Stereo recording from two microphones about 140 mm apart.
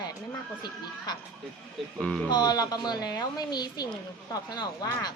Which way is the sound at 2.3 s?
30° left (ahead or behind).